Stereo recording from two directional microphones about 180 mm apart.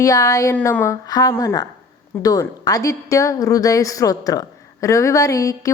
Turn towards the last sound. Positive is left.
turn(degrees=20)  # may be behind; listen again after turning